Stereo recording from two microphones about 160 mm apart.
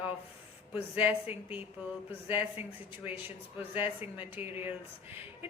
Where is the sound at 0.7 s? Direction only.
10° right (ahead or behind).